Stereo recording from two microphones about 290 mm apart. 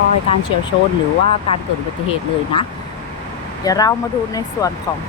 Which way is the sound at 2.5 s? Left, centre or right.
Centre.